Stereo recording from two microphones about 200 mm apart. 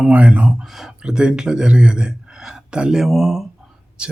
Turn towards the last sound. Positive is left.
turn(degrees=-5)  # may be behind; listen again after turning